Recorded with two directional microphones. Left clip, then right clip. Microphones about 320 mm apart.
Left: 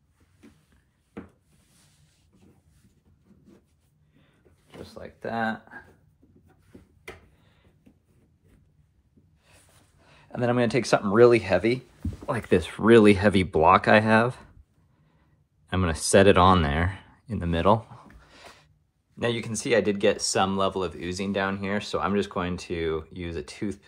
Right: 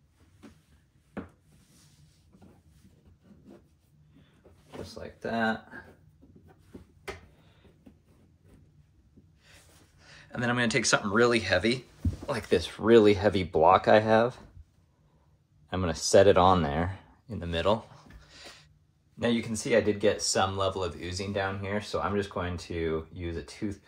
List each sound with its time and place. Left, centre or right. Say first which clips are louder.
5.2 s speech: left 1 dB; centre
10.0 s speech: left 4 dB; centre
15.7 s a sound: left 1 dB; left
19.1 s speech: left 1 dB; left